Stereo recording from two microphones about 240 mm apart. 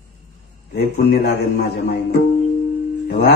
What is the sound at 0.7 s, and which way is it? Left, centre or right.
A man's voice, left.